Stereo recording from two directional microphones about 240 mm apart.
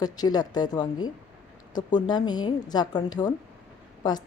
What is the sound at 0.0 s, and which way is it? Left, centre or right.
A woman's voice, centre.